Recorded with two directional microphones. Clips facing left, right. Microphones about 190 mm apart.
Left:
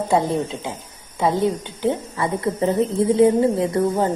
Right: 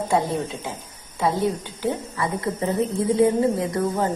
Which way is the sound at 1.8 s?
25° left (ahead or behind).